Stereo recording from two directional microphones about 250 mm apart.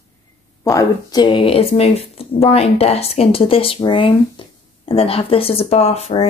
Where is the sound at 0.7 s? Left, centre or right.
Centre.